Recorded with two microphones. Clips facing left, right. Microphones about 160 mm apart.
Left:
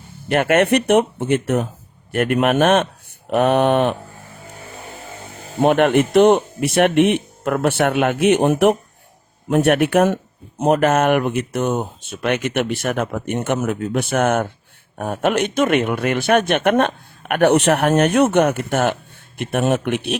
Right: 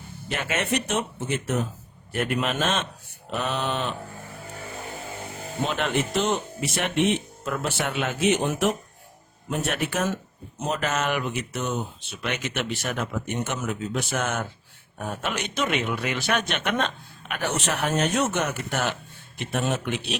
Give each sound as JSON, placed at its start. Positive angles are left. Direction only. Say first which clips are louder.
{"t": 0.3, "sound": "a man's voice", "louder": "left 12 dB", "side_deg": 60}
{"t": 5.6, "sound": "a man's voice", "louder": "left 12 dB", "side_deg": 60}